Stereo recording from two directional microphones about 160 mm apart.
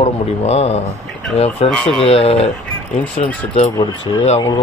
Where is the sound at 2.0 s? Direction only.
35° left (ahead or behind).